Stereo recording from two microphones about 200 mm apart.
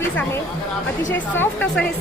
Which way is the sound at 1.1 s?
10° left (ahead or behind).